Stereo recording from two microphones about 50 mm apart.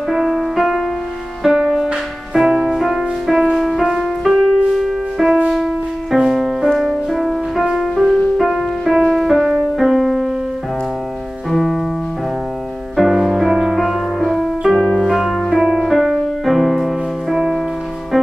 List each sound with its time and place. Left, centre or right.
0.1 s music: centre
1.9 s music: centre
6.1 s music: centre
11.5 s music: centre
12.9 s music: centre
14.8 s music: centre
15.0 s music: centre